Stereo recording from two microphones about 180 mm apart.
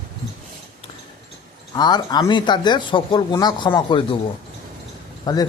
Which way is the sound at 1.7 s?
25° left (ahead or behind).